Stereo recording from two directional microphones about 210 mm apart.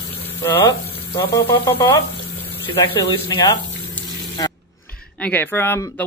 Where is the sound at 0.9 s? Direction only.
25° left (ahead or behind).